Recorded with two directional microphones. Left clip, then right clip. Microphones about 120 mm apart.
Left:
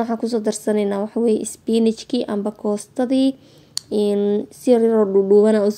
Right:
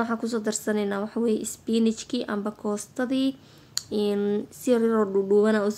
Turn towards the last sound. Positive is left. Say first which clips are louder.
# left 7 dB
turn(degrees=35)  # may be behind; listen again after turning